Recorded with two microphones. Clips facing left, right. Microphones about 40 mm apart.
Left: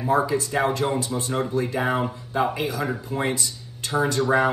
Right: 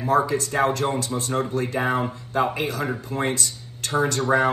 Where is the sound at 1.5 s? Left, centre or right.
Right.